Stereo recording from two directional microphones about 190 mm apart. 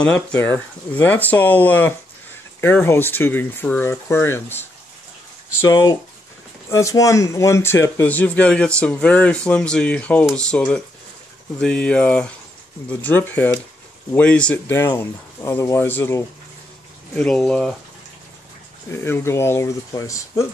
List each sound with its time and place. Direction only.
0.0 s speech: 5° left (ahead or behind)
18.9 s speech: 15° left (ahead or behind)